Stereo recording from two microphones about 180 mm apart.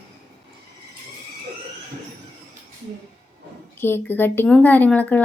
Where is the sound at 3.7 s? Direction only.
15° left (ahead or behind).